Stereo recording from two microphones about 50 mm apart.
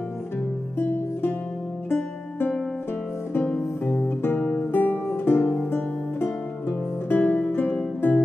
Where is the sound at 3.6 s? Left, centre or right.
Left.